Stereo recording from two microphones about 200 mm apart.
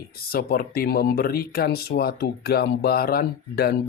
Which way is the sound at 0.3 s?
50° left (ahead or behind).